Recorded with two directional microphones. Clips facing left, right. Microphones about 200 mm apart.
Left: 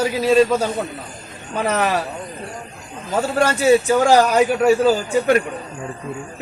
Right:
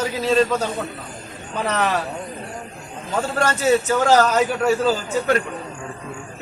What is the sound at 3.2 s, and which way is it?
A man's voice, 10° left (ahead or behind).